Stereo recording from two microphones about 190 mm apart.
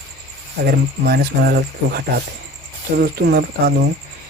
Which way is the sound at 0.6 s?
55° right (ahead or behind).